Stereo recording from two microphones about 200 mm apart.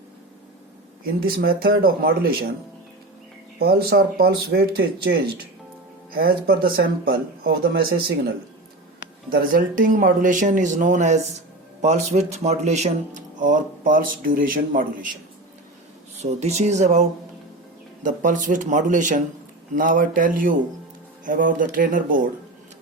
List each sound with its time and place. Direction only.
1.0 s speech: 50° right (ahead or behind)
3.6 s speech: 50° right (ahead or behind)
6.1 s speech: 45° right (ahead or behind)
9.3 s speech: 45° right (ahead or behind)
16.2 s speech: 35° right (ahead or behind)